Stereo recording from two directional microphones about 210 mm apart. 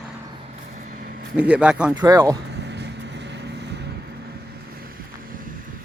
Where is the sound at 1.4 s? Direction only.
5° right (ahead or behind).